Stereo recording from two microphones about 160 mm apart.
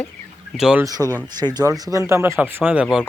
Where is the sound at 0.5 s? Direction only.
5° right (ahead or behind).